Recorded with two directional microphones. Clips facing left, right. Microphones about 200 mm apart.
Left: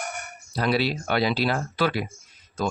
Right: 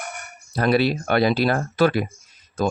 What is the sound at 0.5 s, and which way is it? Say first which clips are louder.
Speech: right 5 dB; 50° right (ahead or behind).